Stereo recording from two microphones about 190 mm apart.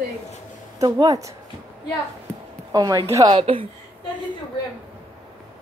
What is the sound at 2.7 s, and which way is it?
Speech, 20° right (ahead or behind).